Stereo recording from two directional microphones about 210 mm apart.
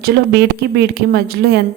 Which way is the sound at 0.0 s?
50° right (ahead or behind).